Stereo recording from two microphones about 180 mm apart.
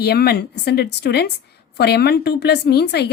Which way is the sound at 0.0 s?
65° left (ahead or behind).